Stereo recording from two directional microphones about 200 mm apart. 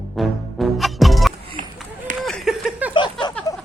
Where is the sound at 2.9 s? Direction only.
25° left (ahead or behind).